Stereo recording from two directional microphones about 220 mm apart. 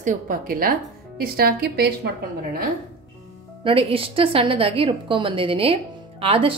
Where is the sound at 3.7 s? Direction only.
25° right (ahead or behind).